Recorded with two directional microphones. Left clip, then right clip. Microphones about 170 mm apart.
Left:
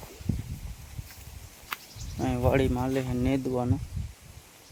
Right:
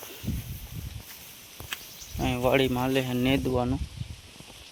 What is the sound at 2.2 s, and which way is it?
Speech, 15° left (ahead or behind).